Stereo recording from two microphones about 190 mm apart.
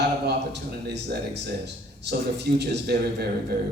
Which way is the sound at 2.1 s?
60° right (ahead or behind).